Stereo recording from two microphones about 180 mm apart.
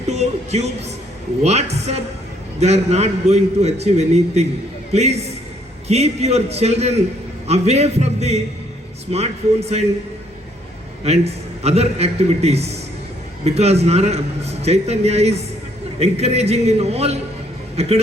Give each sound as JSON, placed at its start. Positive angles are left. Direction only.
{"t": 0.1, "sound": "a man's voice", "side_deg": -40}
{"t": 11.0, "sound": "a man's voice", "side_deg": -35}